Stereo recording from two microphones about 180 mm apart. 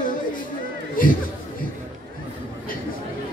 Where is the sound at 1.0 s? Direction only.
50° left (ahead or behind).